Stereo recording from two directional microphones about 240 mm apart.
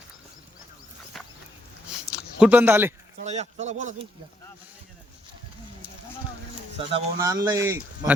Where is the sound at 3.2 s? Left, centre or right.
Right.